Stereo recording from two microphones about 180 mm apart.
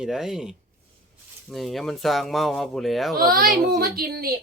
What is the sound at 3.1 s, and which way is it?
Speech, 55° right (ahead or behind).